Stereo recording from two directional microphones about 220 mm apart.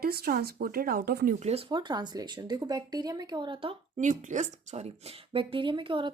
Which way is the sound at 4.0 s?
35° right (ahead or behind).